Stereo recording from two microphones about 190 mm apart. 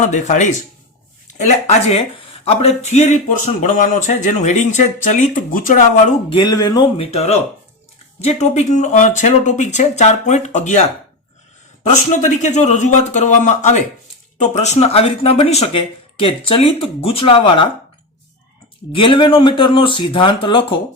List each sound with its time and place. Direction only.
0.0 s speech: 40° left (ahead or behind)
6.3 s speech: 20° left (ahead or behind)
18.9 s speech: 25° left (ahead or behind)